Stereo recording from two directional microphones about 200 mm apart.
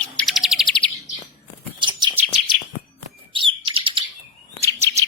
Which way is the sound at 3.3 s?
25° right (ahead or behind).